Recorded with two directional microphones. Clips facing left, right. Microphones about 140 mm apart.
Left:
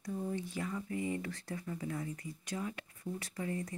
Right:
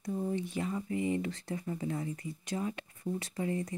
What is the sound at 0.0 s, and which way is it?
Speech, 25° right (ahead or behind).